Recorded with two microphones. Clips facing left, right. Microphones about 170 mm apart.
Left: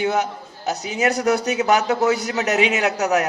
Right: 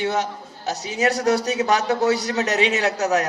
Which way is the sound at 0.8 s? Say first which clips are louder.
Even; 35° right (ahead or behind).